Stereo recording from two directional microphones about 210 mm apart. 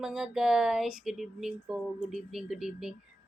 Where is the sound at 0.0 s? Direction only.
Centre (ahead or behind).